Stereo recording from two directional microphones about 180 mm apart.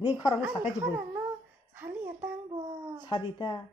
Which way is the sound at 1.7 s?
10° right (ahead or behind).